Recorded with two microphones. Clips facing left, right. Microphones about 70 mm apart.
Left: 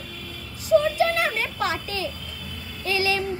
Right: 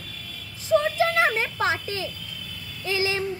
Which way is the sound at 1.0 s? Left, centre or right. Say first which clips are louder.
Right 1 dB; right.